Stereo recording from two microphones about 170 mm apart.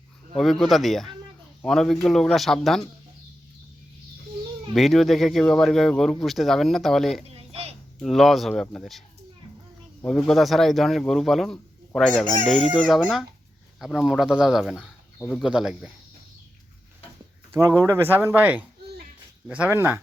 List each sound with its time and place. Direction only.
0.3 s speech: centre (ahead or behind)
4.7 s speech: centre (ahead or behind)
7.3 s a sound: 35° right (ahead or behind)
8.0 s speech: centre (ahead or behind)
15.2 s speech: 5° left (ahead or behind)
15.4 s speech: 5° right (ahead or behind)
17.5 s speech: 15° right (ahead or behind)